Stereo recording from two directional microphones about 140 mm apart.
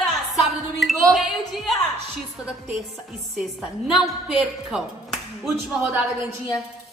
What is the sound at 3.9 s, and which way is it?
Music, 5° right (ahead or behind).